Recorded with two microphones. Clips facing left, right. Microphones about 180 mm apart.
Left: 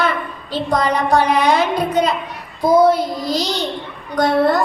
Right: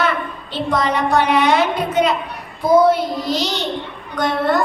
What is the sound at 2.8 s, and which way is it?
A woman's voice, 40° left (ahead or behind).